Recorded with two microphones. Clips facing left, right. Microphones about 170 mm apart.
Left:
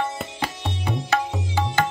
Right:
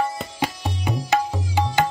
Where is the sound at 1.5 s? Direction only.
15° right (ahead or behind).